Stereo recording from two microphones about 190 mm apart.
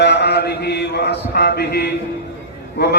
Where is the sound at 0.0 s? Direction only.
60° left (ahead or behind).